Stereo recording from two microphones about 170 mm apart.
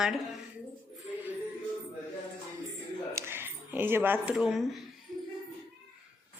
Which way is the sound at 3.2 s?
15° right (ahead or behind).